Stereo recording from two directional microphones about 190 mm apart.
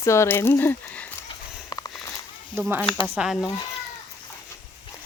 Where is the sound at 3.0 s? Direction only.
5° right (ahead or behind).